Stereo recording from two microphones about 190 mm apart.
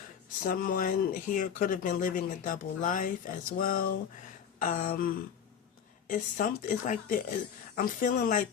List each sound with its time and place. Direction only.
0.4 s speech: 50° left (ahead or behind)